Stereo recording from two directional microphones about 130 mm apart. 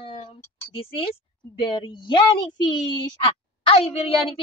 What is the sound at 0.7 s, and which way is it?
A woman's voice, 45° left (ahead or behind).